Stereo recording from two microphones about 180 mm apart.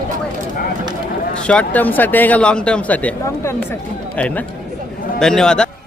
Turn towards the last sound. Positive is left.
turn(degrees=5)  # may be behind; listen again after turning